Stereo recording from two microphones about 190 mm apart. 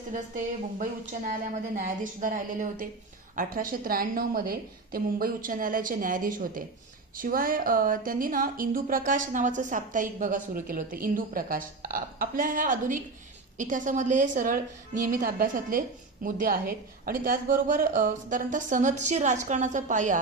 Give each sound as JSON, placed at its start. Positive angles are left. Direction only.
{"t": 0.1, "sound": "speech", "side_deg": -45}